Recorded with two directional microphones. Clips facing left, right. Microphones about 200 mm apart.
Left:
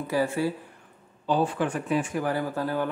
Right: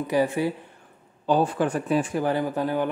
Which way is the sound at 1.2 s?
45° right (ahead or behind).